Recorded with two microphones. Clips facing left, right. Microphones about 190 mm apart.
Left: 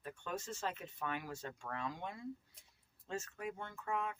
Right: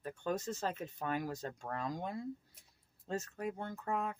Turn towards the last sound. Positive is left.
turn(degrees=-35)  # may be behind; listen again after turning